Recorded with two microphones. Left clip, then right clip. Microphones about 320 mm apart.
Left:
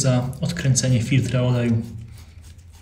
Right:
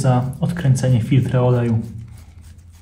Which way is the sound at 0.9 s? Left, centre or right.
Right.